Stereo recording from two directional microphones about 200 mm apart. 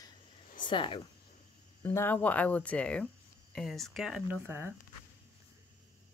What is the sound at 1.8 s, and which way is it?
Speech, 10° left (ahead or behind).